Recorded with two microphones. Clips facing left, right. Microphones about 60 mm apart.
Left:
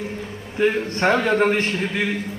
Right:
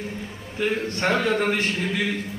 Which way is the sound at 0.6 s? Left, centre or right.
Left.